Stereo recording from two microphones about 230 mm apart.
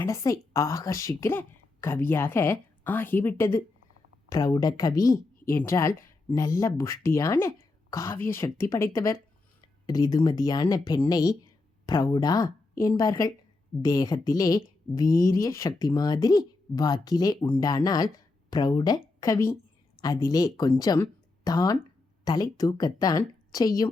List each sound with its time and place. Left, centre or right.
0.0 s speech: centre
8.5 s speech: left
8.8 s speech: centre